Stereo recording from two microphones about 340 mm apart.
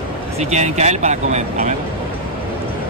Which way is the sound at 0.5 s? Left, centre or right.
Centre.